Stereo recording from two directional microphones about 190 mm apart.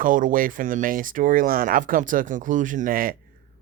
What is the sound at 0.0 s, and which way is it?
Speech, 45° right (ahead or behind).